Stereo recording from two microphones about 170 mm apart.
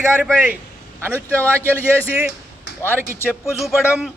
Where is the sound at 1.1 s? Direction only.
10° left (ahead or behind).